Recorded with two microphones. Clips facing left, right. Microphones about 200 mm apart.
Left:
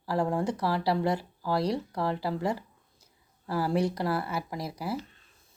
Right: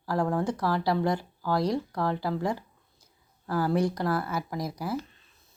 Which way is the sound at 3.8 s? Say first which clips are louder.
Right 1 dB; 5° left (ahead or behind).